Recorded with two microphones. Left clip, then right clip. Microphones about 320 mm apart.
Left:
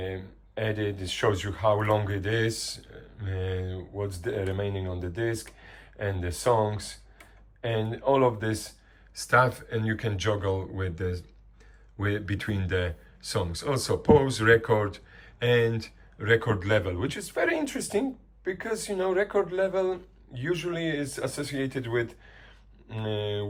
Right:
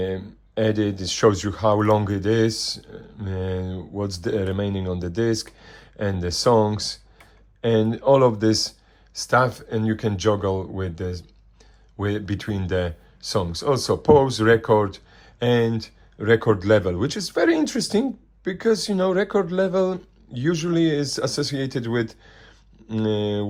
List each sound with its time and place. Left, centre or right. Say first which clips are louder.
0.6 s a man's voice: right 8 dB; centre